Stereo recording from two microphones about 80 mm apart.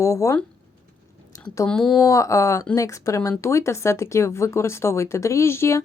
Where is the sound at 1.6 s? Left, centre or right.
Centre.